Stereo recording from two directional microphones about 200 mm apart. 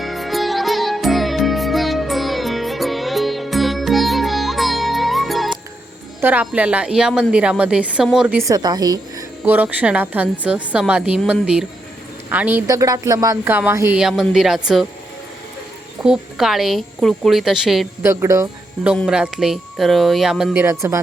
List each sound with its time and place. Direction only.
0.0 s music: centre (ahead or behind)
6.2 s speech: 5° right (ahead or behind)
8.4 s a woman's voice: 20° right (ahead or behind)
9.4 s speech: 10° right (ahead or behind)
16.0 s speech: centre (ahead or behind)
18.1 s speech: 15° right (ahead or behind)